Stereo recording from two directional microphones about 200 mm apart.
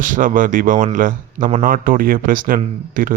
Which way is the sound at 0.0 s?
40° right (ahead or behind).